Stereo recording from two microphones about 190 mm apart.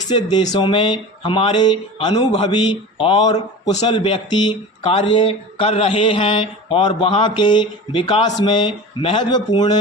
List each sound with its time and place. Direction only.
0.1 s speech: 25° left (ahead or behind)